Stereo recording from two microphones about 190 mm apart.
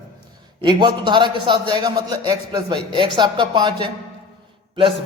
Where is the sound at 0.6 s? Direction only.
20° right (ahead or behind).